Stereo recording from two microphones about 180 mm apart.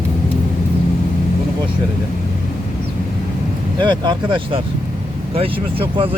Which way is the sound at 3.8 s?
25° right (ahead or behind).